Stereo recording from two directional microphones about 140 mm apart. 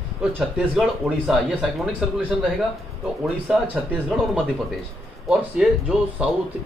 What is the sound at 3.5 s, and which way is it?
Speech, 5° right (ahead or behind).